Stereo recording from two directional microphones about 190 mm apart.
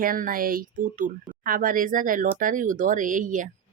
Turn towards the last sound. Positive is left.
turn(degrees=-45)  # may be behind; listen again after turning